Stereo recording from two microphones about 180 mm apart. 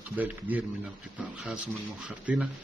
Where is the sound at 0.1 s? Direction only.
10° right (ahead or behind).